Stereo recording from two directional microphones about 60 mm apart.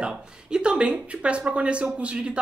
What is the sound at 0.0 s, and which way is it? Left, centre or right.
Speech, centre.